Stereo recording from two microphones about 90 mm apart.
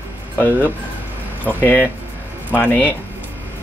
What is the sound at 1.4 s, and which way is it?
Speech, 20° left (ahead or behind).